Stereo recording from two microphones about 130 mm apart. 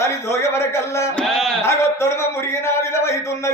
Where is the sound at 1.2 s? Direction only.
5° left (ahead or behind).